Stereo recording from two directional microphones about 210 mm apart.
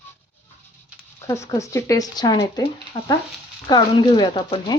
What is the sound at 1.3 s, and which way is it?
Speech, 15° left (ahead or behind).